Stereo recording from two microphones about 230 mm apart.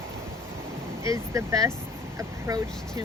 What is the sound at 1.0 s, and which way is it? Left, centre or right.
Speech, centre.